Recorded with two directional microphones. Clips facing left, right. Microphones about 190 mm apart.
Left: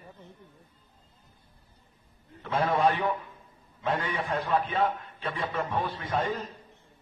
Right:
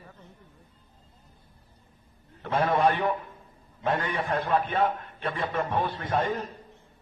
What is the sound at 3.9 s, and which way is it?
A man's voice, 50° right (ahead or behind).